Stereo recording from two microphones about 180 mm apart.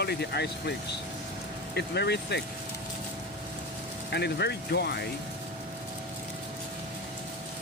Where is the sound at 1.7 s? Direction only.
65° left (ahead or behind).